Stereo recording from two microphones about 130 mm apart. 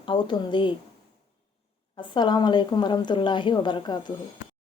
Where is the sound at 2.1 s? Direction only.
35° left (ahead or behind).